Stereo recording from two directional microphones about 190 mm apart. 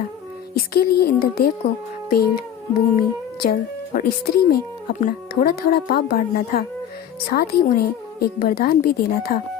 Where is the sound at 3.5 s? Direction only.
50° left (ahead or behind).